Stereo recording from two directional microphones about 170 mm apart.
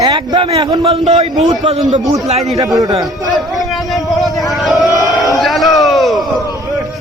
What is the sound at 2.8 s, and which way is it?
Speech, 20° right (ahead or behind).